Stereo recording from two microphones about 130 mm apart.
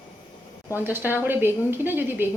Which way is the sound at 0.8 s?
15° right (ahead or behind).